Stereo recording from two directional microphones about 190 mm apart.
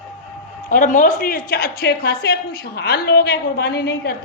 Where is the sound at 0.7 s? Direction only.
45° left (ahead or behind).